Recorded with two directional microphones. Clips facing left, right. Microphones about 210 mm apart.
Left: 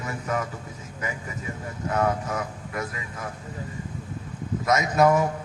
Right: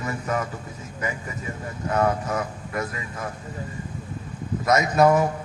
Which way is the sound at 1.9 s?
40° right (ahead or behind).